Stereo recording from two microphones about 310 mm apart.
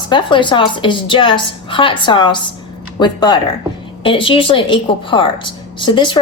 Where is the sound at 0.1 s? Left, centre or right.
Centre.